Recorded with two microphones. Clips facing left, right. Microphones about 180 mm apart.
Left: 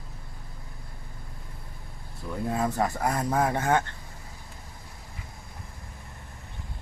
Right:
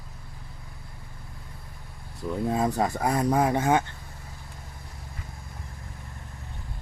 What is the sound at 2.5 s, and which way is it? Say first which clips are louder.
Speech: even; 15° right (ahead or behind).